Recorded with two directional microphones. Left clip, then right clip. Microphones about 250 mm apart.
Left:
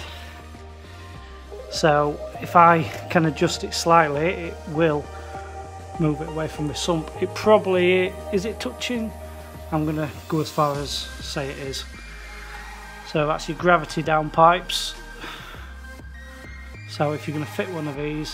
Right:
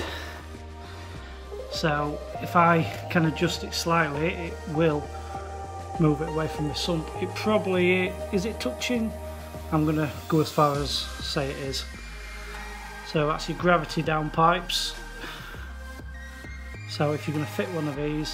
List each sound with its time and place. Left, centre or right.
1.7 s speech: left
5.9 s speech: centre
13.1 s speech: centre
16.9 s speech: centre